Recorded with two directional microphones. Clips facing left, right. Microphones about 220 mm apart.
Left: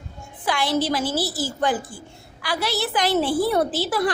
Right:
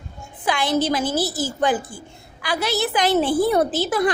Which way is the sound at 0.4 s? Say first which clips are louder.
Right 2 dB; 20° right (ahead or behind).